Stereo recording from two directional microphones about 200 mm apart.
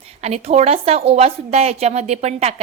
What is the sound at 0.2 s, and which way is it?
A woman's voice, 30° right (ahead or behind).